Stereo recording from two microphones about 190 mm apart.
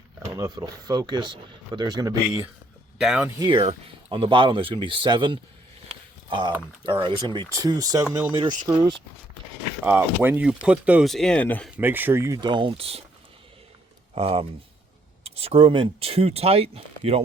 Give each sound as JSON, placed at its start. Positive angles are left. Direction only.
{"t": 0.3, "sound": "speech", "side_deg": -20}
{"t": 3.0, "sound": "speech", "side_deg": -5}
{"t": 3.3, "sound": "speech", "side_deg": -25}
{"t": 6.8, "sound": "speech", "side_deg": -25}
{"t": 9.8, "sound": "speech", "side_deg": -10}
{"t": 11.8, "sound": "speech", "side_deg": -10}
{"t": 14.2, "sound": "speech", "side_deg": -30}